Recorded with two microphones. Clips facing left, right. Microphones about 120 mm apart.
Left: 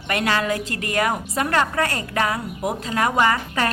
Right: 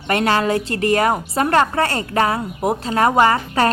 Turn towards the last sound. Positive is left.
turn(degrees=-35)  # may be behind; listen again after turning